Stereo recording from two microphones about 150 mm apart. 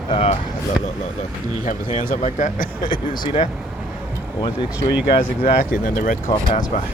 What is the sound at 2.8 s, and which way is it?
Speech, 30° left (ahead or behind).